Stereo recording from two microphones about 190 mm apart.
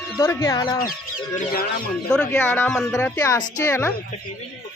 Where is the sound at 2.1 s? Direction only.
5° left (ahead or behind).